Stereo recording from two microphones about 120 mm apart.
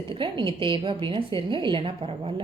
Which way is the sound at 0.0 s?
45° right (ahead or behind).